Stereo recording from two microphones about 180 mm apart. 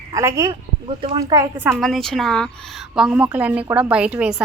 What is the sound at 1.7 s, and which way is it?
A woman's voice, centre (ahead or behind).